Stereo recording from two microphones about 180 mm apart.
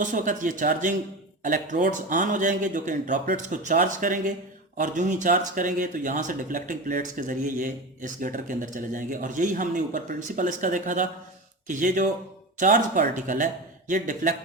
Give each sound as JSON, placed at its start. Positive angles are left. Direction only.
{"t": 0.0, "sound": "speech", "side_deg": -45}